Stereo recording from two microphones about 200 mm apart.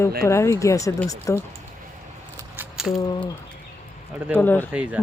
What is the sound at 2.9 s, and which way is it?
Speech, 20° left (ahead or behind).